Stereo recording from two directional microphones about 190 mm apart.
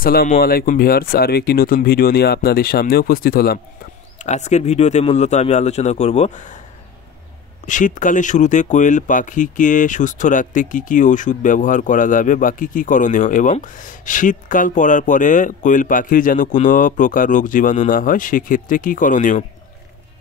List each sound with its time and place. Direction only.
0.0 s speech: 50° left (ahead or behind)
4.2 s speech: 40° left (ahead or behind)
7.6 s speech: 40° left (ahead or behind)